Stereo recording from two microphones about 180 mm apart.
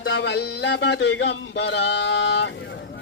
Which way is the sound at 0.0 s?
85° left.